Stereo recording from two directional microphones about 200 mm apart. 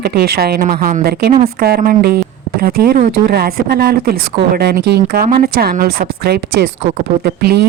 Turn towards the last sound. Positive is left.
turn(degrees=-50)  # may be behind; listen again after turning